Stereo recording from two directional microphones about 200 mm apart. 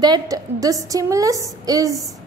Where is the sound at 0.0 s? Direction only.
20° right (ahead or behind).